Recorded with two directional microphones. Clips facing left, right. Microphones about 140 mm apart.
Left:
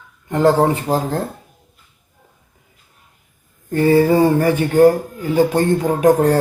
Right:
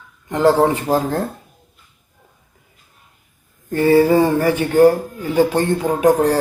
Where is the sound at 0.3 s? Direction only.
45° left (ahead or behind).